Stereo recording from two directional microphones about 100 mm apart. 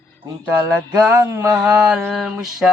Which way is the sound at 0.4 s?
20° right (ahead or behind).